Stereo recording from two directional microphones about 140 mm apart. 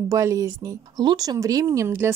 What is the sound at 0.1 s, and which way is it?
Speech, 20° right (ahead or behind).